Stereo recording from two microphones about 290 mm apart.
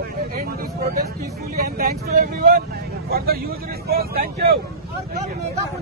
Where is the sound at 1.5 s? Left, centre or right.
Right.